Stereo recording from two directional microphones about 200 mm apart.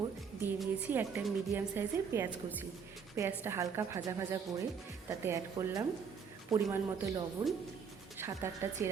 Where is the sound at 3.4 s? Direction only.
15° right (ahead or behind).